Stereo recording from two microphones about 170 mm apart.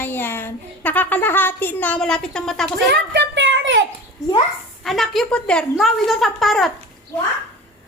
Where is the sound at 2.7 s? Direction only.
90° right.